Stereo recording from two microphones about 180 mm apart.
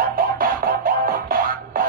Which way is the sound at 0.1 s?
50° right (ahead or behind).